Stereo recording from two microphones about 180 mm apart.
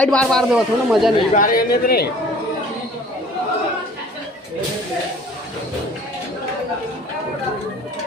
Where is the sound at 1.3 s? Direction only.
50° left (ahead or behind).